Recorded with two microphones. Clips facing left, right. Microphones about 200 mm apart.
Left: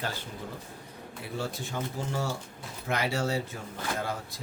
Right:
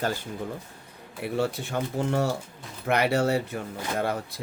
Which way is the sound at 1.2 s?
65° right (ahead or behind).